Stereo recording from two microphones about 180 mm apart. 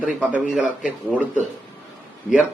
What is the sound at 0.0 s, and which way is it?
Speech, 5° right (ahead or behind).